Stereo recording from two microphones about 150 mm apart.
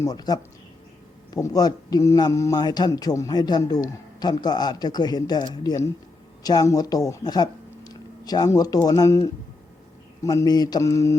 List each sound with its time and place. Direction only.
0.0 s a man's voice: 25° left (ahead or behind)